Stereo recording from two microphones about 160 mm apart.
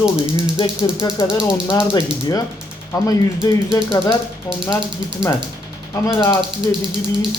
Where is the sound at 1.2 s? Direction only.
35° left (ahead or behind).